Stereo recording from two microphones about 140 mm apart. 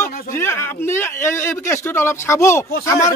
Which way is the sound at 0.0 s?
15° left (ahead or behind).